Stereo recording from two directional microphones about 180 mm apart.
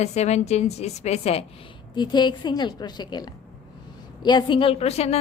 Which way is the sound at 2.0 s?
25° left (ahead or behind).